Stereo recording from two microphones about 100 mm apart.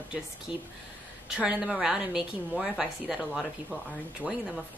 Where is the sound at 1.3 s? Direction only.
10° right (ahead or behind).